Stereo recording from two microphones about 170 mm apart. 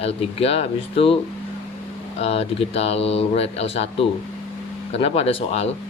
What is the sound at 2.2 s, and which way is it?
Speech, 35° left (ahead or behind).